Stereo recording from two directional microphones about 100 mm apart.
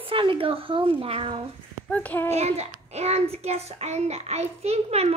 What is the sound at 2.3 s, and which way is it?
A child's voice, 90° right.